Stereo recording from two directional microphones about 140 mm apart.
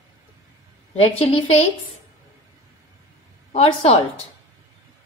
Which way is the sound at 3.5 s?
45° left (ahead or behind).